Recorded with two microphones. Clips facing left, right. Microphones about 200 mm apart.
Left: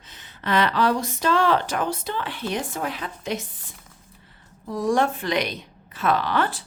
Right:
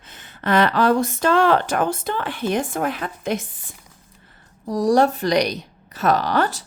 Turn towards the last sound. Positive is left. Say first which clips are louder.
# right 3 dB
turn(degrees=-40)  # may be behind; listen again after turning